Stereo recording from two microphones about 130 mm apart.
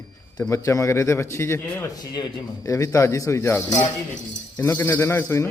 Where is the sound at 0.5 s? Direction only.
25° left (ahead or behind).